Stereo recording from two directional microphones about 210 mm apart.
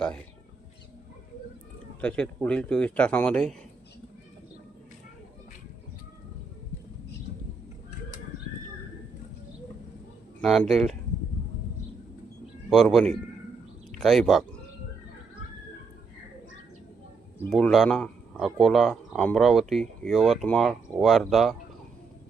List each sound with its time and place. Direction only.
2.0 s speech: 5° left (ahead or behind)
10.4 s speech: centre (ahead or behind)
12.7 s speech: centre (ahead or behind)
17.4 s speech: centre (ahead or behind)